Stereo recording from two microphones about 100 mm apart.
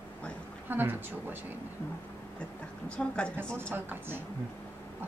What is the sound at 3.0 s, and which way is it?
Speech, 10° left (ahead or behind).